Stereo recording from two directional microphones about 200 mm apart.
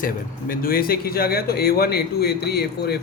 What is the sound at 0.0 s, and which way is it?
A man's voice, 45° left (ahead or behind).